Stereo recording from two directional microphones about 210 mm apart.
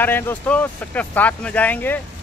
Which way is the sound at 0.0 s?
10° left (ahead or behind).